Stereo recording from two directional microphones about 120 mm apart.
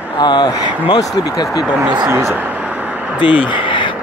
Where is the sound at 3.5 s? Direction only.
45° left (ahead or behind).